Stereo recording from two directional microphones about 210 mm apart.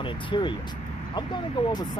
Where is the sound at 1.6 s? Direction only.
20° left (ahead or behind).